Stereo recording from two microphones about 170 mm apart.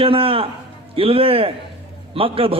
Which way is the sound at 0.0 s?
35° right (ahead or behind).